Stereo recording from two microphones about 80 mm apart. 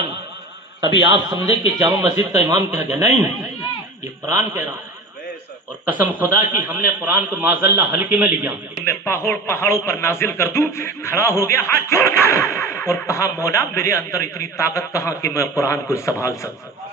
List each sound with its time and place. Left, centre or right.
0.8 s a man's voice: right
5.9 s a man's voice: right
8.8 s a man's voice: left